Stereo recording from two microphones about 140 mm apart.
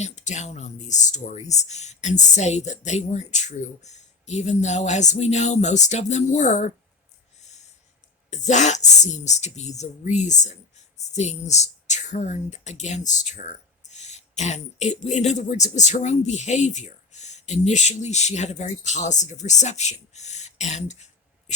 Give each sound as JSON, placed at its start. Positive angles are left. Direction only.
{"t": 0.0, "sound": "speech", "side_deg": 55}
{"t": 8.3, "sound": "speech", "side_deg": 60}